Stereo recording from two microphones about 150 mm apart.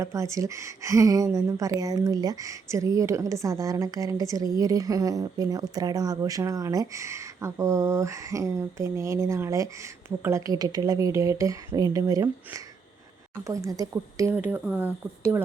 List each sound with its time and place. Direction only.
0.0 s a woman's voice: 20° right (ahead or behind)